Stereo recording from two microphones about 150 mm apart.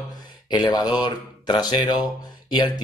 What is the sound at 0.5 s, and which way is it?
Speech, 30° left (ahead or behind).